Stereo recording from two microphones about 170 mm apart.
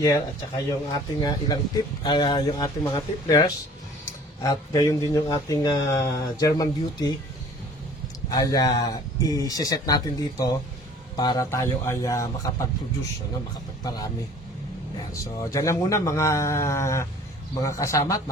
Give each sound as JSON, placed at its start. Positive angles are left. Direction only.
{"t": 0.0, "sound": "speech", "side_deg": 20}
{"t": 8.3, "sound": "speech", "side_deg": 20}
{"t": 13.8, "sound": "speech", "side_deg": 20}
{"t": 15.1, "sound": "speech", "side_deg": 20}